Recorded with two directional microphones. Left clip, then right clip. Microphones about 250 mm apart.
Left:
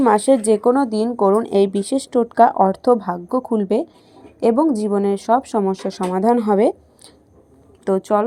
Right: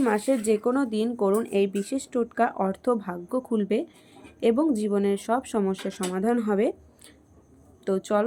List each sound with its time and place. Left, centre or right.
0.0 s speech: centre
6.5 s speech: centre
7.9 s speech: centre